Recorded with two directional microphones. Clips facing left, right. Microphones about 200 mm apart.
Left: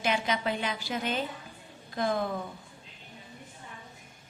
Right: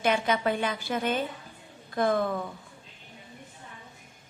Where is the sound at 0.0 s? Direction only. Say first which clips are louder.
Right 4 dB; 50° right (ahead or behind).